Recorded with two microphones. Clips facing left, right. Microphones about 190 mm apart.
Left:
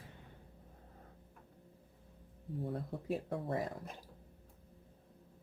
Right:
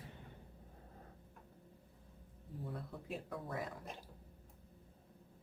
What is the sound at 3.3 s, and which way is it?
Speech, 30° left (ahead or behind).